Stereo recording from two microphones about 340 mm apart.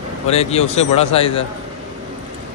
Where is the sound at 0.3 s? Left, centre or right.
Centre.